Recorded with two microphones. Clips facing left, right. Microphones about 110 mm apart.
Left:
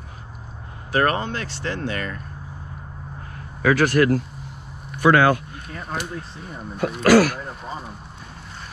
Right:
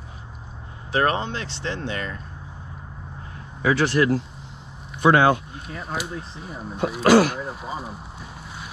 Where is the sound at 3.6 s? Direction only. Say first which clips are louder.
Left 2 dB; 50° left (ahead or behind).